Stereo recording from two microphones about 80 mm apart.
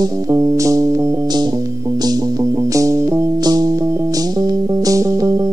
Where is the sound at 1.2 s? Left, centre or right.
Right.